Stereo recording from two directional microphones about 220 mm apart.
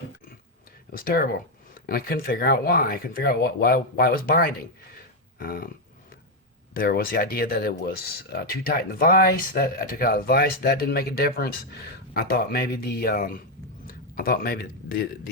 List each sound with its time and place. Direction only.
0.9 s speech: 40° left (ahead or behind)
5.4 s a sound: 45° left (ahead or behind)
6.7 s speech: 45° left (ahead or behind)